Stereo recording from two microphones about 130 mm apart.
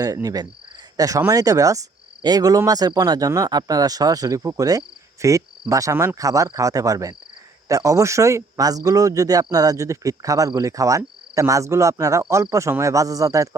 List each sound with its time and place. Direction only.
0.0 s speech: 30° right (ahead or behind)